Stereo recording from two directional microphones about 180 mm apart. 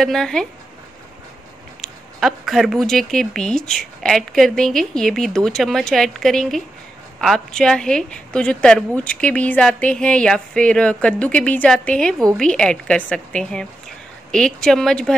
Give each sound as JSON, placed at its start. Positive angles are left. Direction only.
{"t": 0.0, "sound": "a woman's voice", "side_deg": 0}
{"t": 1.8, "sound": "a woman's voice", "side_deg": 0}